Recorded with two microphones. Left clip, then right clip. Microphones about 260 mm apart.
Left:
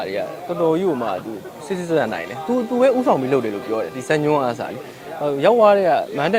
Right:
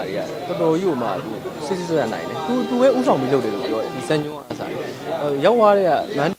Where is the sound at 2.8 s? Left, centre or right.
Left.